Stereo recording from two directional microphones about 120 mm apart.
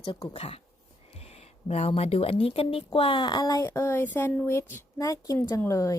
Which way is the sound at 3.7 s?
20° left (ahead or behind).